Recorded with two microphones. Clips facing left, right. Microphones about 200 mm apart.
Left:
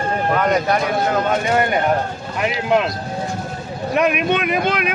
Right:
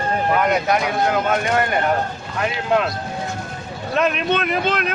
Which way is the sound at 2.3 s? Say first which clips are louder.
Left 2 dB; 20° left (ahead or behind).